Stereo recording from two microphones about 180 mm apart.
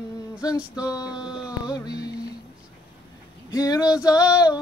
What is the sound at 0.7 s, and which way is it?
Speech, 20° left (ahead or behind).